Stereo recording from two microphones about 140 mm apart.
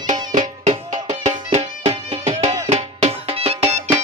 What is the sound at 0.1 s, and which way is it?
Music, 65° right (ahead or behind).